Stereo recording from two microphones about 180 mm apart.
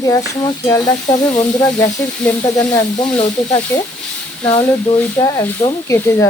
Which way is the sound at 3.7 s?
15° left (ahead or behind).